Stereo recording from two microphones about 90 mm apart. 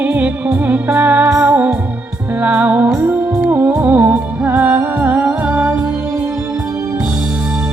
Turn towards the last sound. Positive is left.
turn(degrees=-20)  # may be behind; listen again after turning